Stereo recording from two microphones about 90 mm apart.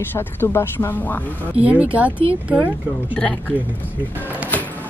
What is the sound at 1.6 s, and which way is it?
Speech, 15° right (ahead or behind).